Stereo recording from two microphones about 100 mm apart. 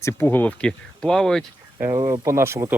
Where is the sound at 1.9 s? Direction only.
50° right (ahead or behind).